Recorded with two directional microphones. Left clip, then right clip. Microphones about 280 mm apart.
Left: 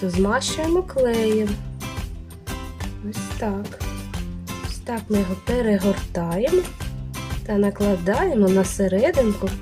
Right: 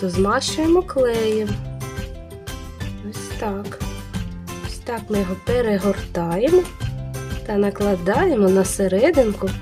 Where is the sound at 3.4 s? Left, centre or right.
Centre.